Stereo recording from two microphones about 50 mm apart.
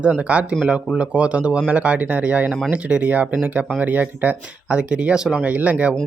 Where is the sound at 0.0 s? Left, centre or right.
Right.